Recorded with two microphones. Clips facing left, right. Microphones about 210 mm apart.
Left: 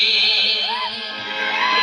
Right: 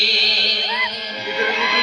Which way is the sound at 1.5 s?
50° right (ahead or behind).